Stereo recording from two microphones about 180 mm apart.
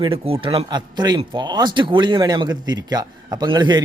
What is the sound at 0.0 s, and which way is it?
A man's voice, 30° right (ahead or behind).